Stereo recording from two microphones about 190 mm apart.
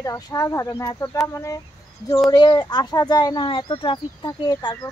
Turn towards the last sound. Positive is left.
turn(degrees=20)  # may be behind; listen again after turning